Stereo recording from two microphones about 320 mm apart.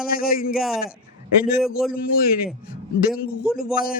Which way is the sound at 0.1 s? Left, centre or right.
Left.